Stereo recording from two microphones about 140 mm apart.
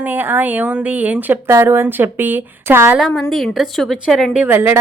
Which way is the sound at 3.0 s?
Centre (ahead or behind).